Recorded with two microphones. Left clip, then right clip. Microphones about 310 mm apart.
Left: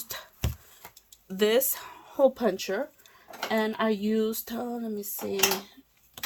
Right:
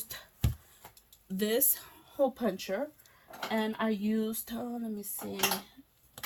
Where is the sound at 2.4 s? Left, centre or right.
Centre.